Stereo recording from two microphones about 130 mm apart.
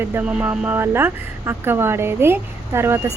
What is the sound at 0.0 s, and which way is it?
A woman's voice, 15° right (ahead or behind).